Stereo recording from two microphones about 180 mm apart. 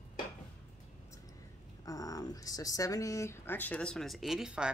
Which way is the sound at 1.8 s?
20° left (ahead or behind).